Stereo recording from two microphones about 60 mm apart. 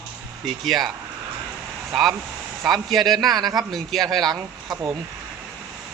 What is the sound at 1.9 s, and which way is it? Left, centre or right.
A man's voice, centre.